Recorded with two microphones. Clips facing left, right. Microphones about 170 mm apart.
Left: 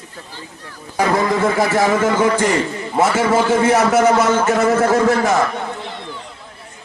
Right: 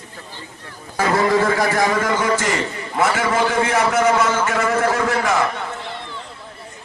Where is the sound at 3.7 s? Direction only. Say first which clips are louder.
Left 4 dB; 40° left (ahead or behind).